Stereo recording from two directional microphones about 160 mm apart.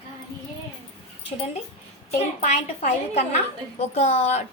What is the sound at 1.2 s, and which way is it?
A woman's voice, 40° left (ahead or behind).